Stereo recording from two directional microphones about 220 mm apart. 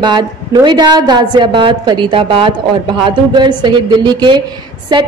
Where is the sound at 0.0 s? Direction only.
20° right (ahead or behind).